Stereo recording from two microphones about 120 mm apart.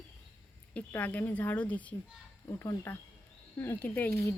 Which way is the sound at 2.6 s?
25° left (ahead or behind).